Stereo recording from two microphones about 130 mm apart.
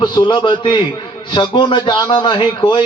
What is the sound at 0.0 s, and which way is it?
A man's voice, 35° left (ahead or behind).